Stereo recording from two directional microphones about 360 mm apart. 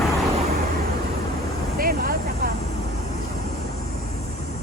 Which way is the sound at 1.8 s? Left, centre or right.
Right.